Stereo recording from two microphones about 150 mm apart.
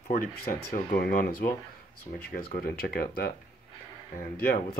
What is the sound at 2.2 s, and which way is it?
Speech, 90° left.